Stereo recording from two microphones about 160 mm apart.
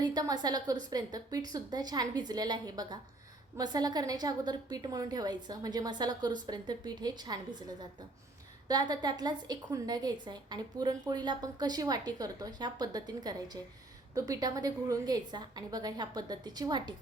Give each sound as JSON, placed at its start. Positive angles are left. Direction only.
{"t": 0.0, "sound": "a woman's voice", "side_deg": -25}
{"t": 8.6, "sound": "a woman's voice", "side_deg": -25}